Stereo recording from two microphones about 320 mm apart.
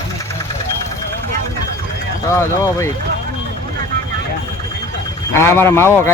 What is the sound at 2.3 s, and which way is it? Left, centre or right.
Speech, centre.